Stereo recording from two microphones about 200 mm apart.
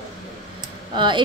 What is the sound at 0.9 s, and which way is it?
Speech, 25° right (ahead or behind).